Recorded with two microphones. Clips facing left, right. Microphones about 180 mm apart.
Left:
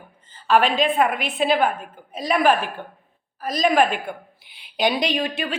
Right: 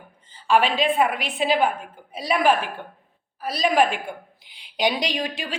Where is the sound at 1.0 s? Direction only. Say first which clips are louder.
Left 2 dB; 55° left (ahead or behind).